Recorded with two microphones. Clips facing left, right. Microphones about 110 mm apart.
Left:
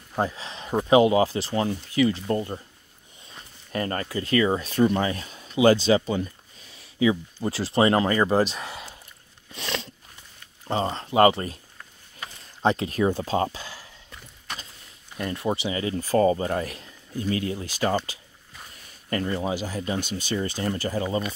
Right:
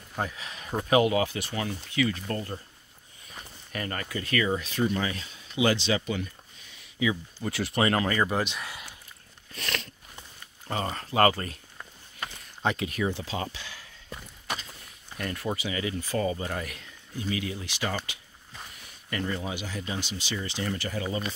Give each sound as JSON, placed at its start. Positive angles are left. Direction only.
{"t": 0.1, "sound": "speech", "side_deg": 30}
{"t": 3.3, "sound": "a sound", "side_deg": 35}
{"t": 4.5, "sound": "speech", "side_deg": 45}
{"t": 9.5, "sound": "biting", "side_deg": 20}
{"t": 10.7, "sound": "speech", "side_deg": 25}
{"t": 12.6, "sound": "speech", "side_deg": 35}
{"t": 14.5, "sound": "vehicle", "side_deg": -5}
{"t": 15.1, "sound": "speech", "side_deg": 25}